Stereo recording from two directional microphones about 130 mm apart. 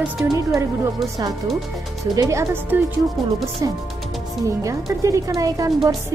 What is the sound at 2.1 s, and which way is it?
Speech, 25° right (ahead or behind).